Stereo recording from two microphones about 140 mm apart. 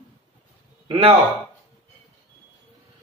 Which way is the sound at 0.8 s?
35° right (ahead or behind).